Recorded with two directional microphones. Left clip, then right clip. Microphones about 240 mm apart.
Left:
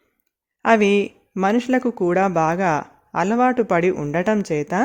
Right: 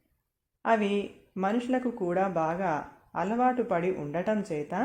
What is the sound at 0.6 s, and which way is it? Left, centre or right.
Speech, left.